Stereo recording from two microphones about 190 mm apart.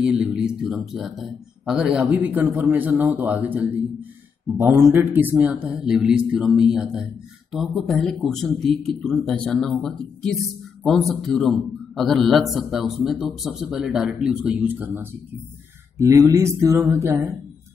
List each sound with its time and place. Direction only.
0.0 s a man's voice: 5° right (ahead or behind)